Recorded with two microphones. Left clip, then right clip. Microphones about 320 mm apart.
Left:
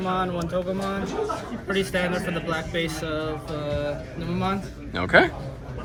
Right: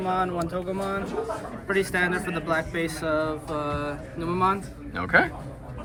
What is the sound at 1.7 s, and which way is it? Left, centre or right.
Speech, left.